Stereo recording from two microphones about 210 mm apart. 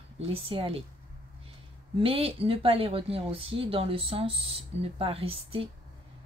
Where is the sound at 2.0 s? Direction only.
25° right (ahead or behind).